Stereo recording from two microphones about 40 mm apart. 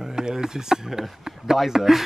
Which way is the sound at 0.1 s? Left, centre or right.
Centre.